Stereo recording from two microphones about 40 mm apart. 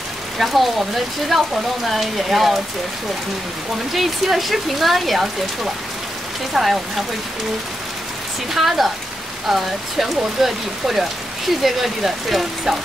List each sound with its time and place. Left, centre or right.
0.4 s speech: centre
3.9 s speech: centre
6.5 s speech: centre
8.5 s speech: centre